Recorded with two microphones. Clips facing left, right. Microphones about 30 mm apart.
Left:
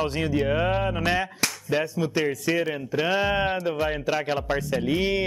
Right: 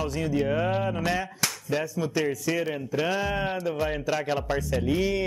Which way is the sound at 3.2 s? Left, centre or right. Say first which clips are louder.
Left 4 dB; left.